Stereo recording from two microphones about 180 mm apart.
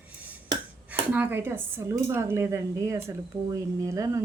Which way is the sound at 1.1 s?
10° right (ahead or behind).